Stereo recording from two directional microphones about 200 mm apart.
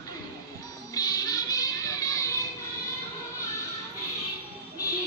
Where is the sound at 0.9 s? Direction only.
20° left (ahead or behind).